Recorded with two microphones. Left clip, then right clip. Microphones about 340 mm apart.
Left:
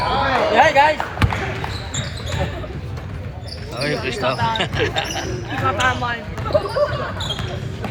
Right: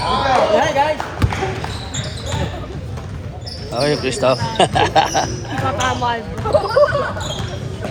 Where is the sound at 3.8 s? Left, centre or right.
Centre.